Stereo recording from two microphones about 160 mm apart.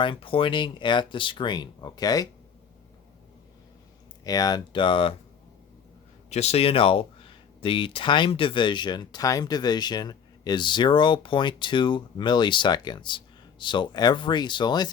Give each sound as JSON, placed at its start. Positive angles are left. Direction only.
{"t": 0.0, "sound": "speech", "side_deg": 30}
{"t": 4.2, "sound": "speech", "side_deg": 25}
{"t": 6.3, "sound": "speech", "side_deg": 40}